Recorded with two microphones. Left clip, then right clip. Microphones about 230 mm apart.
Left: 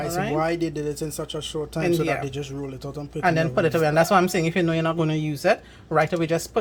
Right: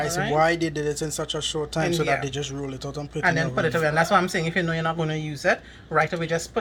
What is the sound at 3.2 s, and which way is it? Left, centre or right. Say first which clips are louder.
Speech: left 2 dB; left.